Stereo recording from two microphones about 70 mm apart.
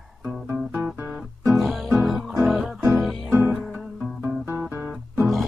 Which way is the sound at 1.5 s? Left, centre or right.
Centre.